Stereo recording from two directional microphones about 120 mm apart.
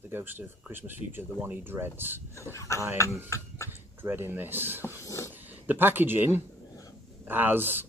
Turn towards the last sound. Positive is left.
turn(degrees=-15)  # may be behind; listen again after turning